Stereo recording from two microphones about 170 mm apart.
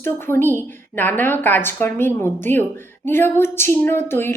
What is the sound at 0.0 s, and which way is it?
A woman's voice, 15° left (ahead or behind).